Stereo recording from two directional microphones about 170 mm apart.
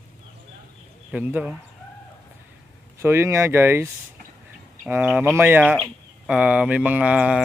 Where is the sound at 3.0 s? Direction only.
15° right (ahead or behind).